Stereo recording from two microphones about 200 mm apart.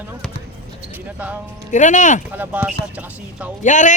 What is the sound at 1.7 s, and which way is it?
Speech, 40° left (ahead or behind).